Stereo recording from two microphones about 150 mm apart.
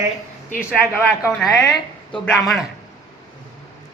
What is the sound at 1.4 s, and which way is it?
A woman's voice, centre (ahead or behind).